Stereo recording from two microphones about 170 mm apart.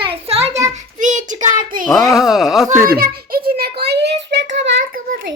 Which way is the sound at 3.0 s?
60° right (ahead or behind).